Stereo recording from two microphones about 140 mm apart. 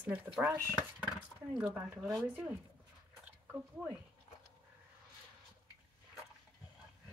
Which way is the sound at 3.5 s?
10° right (ahead or behind).